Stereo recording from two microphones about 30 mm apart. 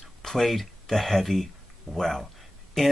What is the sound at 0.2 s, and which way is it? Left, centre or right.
Speech, centre.